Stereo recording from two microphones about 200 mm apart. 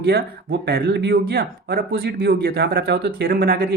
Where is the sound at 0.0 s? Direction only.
50° right (ahead or behind).